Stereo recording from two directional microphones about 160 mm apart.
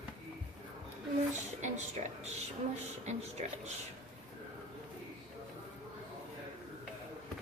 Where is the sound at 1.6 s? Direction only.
50° right (ahead or behind).